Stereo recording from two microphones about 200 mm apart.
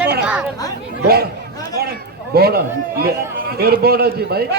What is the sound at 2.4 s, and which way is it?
A man's voice, 50° right (ahead or behind).